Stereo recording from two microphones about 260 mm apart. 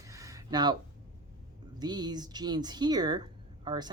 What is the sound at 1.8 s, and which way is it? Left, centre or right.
Speech, centre.